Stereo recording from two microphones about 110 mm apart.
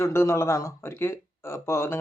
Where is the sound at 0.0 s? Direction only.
25° left (ahead or behind).